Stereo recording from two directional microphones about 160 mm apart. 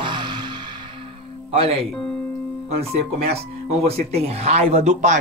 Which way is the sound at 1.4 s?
35° right (ahead or behind).